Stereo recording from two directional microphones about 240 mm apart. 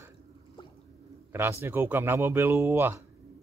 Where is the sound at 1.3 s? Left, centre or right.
Centre.